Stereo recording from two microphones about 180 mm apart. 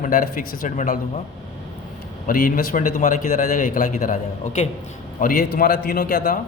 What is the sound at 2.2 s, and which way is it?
A man's voice, 50° left (ahead or behind).